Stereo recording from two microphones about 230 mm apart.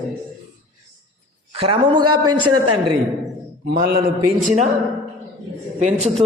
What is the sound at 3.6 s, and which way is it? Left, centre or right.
Speech, right.